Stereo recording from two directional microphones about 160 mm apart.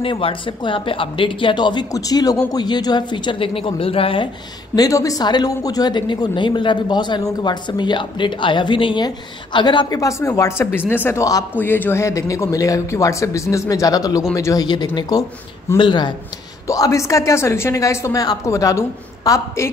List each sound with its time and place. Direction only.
0.0 s a woman's voice: 35° left (ahead or behind)
4.7 s a woman's voice: 20° left (ahead or behind)